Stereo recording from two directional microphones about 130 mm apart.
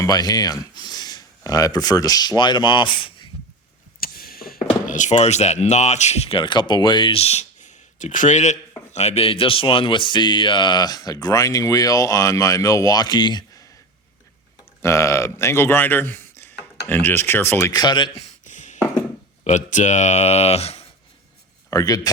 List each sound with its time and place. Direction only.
0.0 s speech: 30° left (ahead or behind)
4.0 s a sound: 90° left
4.9 s speech: 65° left (ahead or behind); by 18.1 s 35° left (ahead or behind)
18.4 s a sound: 70° left (ahead or behind)
19.5 s speech: 65° left (ahead or behind)
21.7 s a man's voice: 25° left (ahead or behind)